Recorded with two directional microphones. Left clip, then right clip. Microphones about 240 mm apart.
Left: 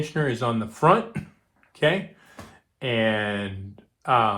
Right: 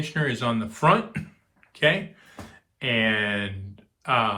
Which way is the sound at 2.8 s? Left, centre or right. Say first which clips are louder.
Even; centre.